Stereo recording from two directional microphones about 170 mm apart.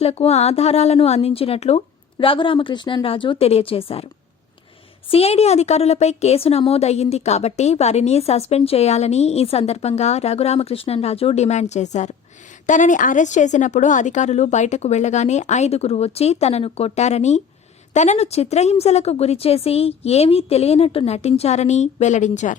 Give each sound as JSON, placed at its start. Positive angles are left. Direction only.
{"t": 0.0, "sound": "a woman's voice", "side_deg": 35}
{"t": 5.1, "sound": "a woman's voice", "side_deg": 35}